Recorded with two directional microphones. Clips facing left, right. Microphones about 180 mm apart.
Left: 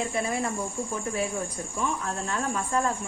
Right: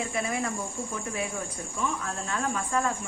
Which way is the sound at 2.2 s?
35° left (ahead or behind).